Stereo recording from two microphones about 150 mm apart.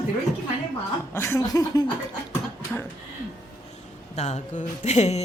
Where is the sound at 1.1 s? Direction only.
15° left (ahead or behind).